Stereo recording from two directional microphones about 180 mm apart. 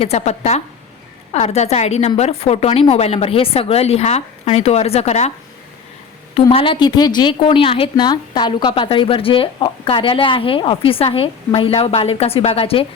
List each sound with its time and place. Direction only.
0.0 s a woman's voice: 35° left (ahead or behind)
6.5 s speech: 30° left (ahead or behind)